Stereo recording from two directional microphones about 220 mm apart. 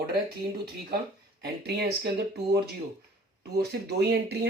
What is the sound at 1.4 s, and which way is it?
Speech, 45° right (ahead or behind).